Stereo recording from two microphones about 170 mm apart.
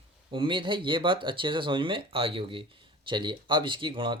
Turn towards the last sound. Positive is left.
turn(degrees=-30)  # may be behind; listen again after turning